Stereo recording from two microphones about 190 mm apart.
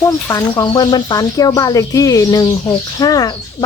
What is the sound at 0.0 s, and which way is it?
Speech, 15° left (ahead or behind).